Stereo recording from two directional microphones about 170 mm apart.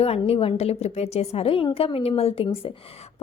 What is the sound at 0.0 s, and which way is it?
A woman's voice, 35° left (ahead or behind).